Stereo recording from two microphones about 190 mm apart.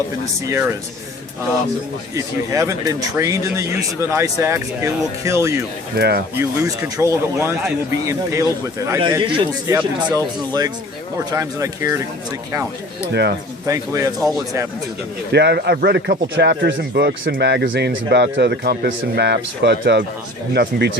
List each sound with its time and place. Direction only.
0.4 s speech: 15° right (ahead or behind)
2.1 s speech: 15° right (ahead or behind)
6.0 s speech: 60° right (ahead or behind)
6.3 s speech: 15° right (ahead or behind)
13.7 s speech: 15° right (ahead or behind)
15.3 s speech: 60° right (ahead or behind)